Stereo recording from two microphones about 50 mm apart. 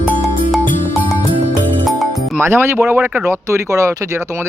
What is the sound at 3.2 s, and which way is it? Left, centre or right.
Speech, right.